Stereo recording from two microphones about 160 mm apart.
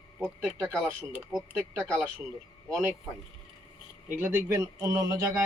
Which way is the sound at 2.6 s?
5° left (ahead or behind).